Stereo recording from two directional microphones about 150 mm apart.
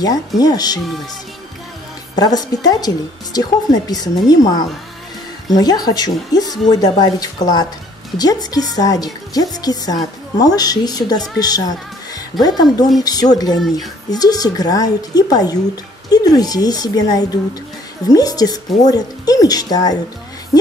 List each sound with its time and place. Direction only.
0.0 s a woman's voice: 25° left (ahead or behind)
2.1 s a woman's voice: 25° left (ahead or behind)
13.6 s a woman's voice: centre (ahead or behind)
14.1 s a woman's voice: 25° left (ahead or behind)